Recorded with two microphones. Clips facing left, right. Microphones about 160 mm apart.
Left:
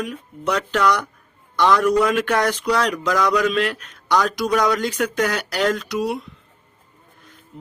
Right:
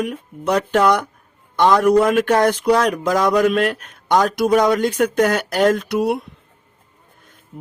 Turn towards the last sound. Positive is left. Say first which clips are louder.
# right 4 dB
turn(degrees=-55)  # may be behind; listen again after turning